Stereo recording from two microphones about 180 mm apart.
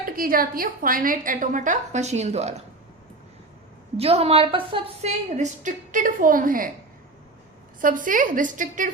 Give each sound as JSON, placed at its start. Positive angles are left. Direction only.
{"t": 0.0, "sound": "a woman's voice", "side_deg": -55}
{"t": 3.9, "sound": "a woman's voice", "side_deg": -35}
{"t": 7.8, "sound": "a woman's voice", "side_deg": -50}